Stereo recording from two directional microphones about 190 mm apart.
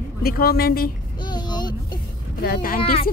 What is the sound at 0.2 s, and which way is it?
Speech, 55° left (ahead or behind).